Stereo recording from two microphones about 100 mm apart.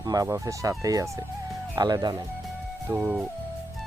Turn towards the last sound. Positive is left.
turn(degrees=-15)  # may be behind; listen again after turning